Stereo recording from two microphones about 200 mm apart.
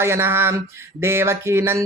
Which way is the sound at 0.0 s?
10° right (ahead or behind).